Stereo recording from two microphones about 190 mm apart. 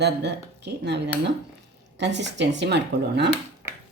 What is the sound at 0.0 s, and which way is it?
Speech, 60° right (ahead or behind).